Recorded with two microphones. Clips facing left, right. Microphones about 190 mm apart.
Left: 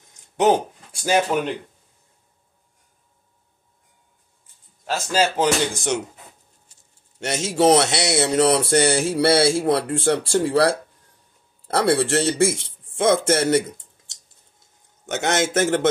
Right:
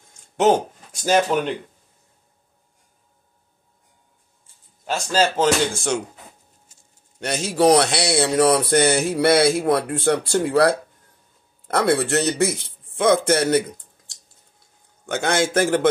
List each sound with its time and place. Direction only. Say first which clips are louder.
1.0 s speech: right 1 dB; 5° left (ahead or behind)
4.8 s speech: right 1 dB; 5° left (ahead or behind)
7.2 s speech: even; 25° left (ahead or behind)